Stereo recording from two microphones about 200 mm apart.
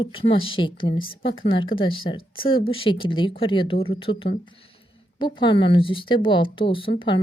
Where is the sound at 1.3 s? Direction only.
75° left (ahead or behind).